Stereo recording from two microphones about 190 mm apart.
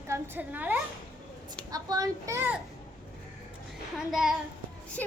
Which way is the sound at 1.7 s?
20° right (ahead or behind).